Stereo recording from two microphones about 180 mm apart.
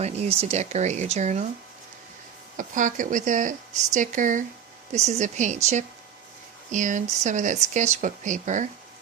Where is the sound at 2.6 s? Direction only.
45° right (ahead or behind).